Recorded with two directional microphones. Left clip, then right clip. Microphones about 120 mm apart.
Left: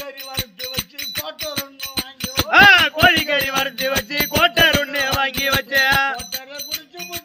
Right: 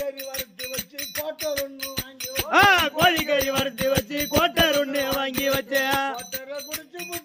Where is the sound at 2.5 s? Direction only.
25° right (ahead or behind).